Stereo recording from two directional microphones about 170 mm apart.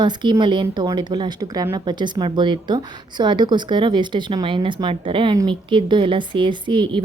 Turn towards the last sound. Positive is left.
turn(degrees=-30)  # may be behind; listen again after turning